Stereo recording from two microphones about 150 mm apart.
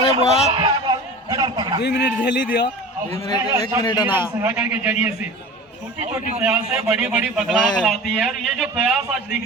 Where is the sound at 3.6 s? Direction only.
30° left (ahead or behind).